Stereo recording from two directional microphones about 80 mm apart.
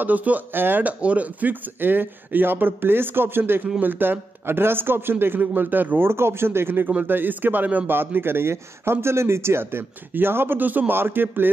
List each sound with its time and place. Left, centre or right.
0.0 s a man's voice: right